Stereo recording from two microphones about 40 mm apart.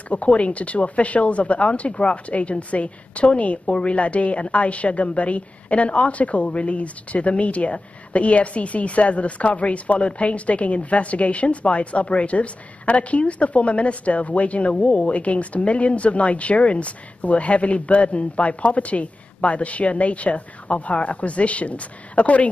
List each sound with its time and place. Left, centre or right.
0.1 s speech: left